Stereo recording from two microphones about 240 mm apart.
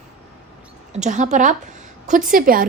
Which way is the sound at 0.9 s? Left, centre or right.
Right.